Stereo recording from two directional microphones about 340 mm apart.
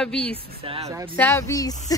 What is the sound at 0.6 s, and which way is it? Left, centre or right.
Speech, centre.